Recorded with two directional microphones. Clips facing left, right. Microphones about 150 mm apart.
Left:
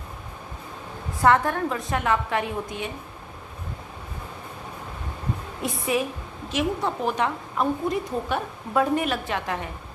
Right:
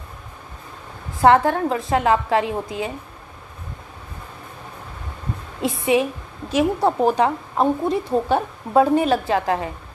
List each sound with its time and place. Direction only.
1.2 s a woman's voice: 25° right (ahead or behind)
2.7 s speech: 90° right
5.6 s a woman's voice: 25° right (ahead or behind)
6.5 s a woman's voice: 35° right (ahead or behind)